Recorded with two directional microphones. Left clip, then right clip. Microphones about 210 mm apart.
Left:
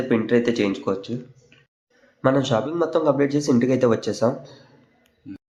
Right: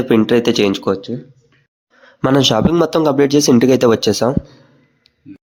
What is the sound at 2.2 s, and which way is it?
Speech, 50° right (ahead or behind).